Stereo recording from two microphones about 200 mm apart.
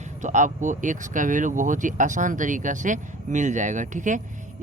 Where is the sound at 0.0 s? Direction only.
40° right (ahead or behind).